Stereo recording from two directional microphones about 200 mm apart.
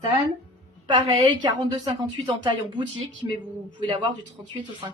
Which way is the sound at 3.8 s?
25° right (ahead or behind).